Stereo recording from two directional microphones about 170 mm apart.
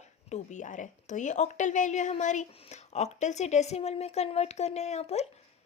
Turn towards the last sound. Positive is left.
turn(degrees=40)  # may be behind; listen again after turning